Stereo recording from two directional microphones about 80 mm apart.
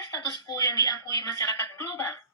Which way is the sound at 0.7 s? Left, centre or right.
Left.